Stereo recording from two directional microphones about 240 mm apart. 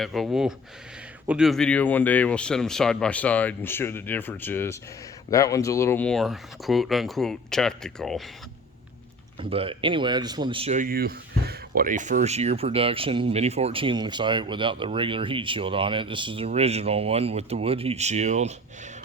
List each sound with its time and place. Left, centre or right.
0.0 s speech: centre
9.4 s speech: right